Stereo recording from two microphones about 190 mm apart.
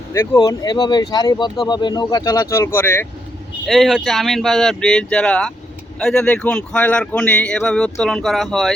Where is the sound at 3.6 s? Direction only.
Centre (ahead or behind).